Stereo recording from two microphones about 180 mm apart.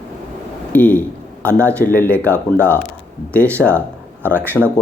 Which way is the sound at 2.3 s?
15° right (ahead or behind).